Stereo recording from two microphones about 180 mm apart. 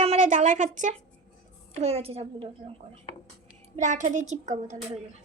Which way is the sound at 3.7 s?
45° right (ahead or behind).